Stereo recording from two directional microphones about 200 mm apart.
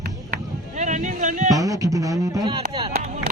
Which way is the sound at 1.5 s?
15° right (ahead or behind).